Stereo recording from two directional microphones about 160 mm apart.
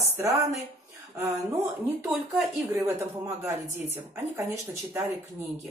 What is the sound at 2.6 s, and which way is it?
A woman's voice, 10° right (ahead or behind).